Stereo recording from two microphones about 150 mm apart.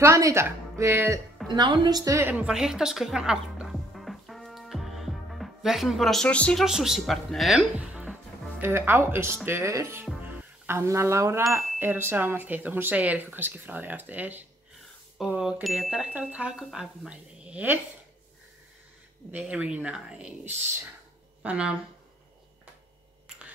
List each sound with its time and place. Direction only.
0.0 s speech: 20° right (ahead or behind)
1.5 s a sound: 30° right (ahead or behind); by 6.6 s 10° left (ahead or behind)
6.6 s speech: 5° right (ahead or behind)
19.3 s speech: 10° right (ahead or behind)